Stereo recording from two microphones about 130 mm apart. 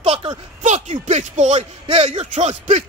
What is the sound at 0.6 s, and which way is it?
Speech, 65° right (ahead or behind).